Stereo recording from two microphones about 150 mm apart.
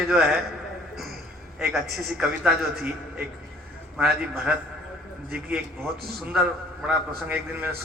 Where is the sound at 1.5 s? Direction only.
5° right (ahead or behind).